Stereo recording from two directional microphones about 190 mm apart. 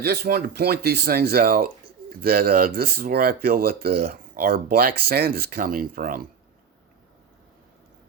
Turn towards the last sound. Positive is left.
turn(degrees=-50)  # may be behind; listen again after turning